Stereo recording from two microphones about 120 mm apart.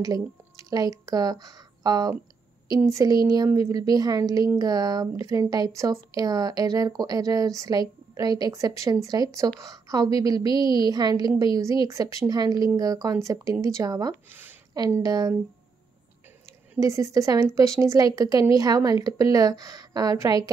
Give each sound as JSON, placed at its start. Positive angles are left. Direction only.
{"t": 0.7, "sound": "speech", "side_deg": -30}
{"t": 16.8, "sound": "speech", "side_deg": -25}